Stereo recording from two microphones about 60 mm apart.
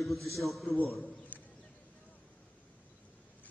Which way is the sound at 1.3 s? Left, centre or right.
Left.